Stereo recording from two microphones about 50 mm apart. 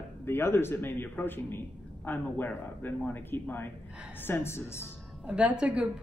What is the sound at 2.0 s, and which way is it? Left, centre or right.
A man's voice, left.